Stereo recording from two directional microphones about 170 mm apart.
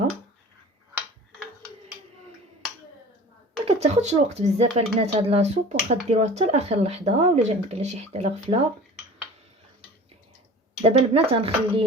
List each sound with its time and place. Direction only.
3.7 s speech: 40° right (ahead or behind)
10.8 s speech: 35° right (ahead or behind)